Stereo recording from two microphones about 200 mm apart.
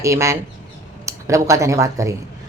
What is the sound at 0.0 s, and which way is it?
A woman's voice, 15° right (ahead or behind).